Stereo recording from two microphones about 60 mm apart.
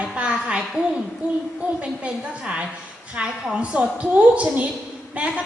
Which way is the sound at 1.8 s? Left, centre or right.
Centre.